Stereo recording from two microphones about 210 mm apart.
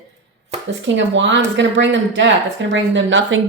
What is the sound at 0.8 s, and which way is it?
A woman's voice, 60° right (ahead or behind).